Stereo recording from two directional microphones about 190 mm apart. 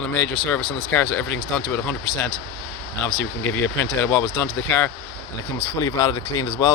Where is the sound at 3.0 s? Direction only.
10° left (ahead or behind).